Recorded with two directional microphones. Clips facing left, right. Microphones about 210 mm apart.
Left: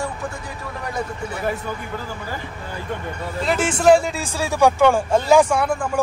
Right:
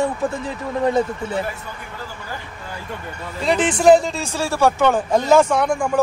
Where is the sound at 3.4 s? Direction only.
5° left (ahead or behind).